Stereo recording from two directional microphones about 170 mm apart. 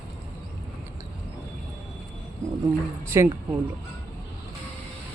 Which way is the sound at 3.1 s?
15° right (ahead or behind).